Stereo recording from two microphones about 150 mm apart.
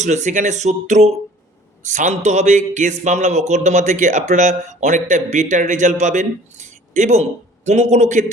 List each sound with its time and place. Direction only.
0.0 s a man's voice: 50° right (ahead or behind)